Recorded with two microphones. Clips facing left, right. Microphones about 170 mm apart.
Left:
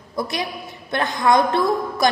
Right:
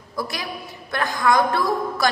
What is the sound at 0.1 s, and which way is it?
A woman's voice, 20° left (ahead or behind).